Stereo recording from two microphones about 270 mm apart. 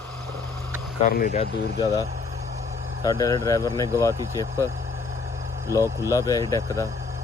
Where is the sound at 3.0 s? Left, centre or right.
Centre.